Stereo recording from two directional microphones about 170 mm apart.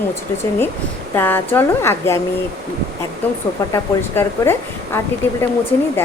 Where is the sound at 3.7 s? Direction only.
15° left (ahead or behind).